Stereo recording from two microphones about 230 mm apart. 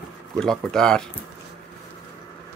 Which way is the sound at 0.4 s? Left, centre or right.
Centre.